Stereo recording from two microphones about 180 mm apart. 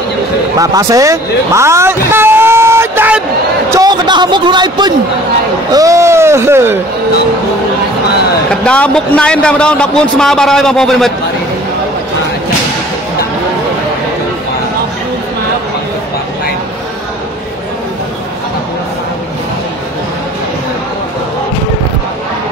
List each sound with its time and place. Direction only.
0.6 s a man's voice: 20° right (ahead or behind)
8.5 s a man's voice: 5° left (ahead or behind)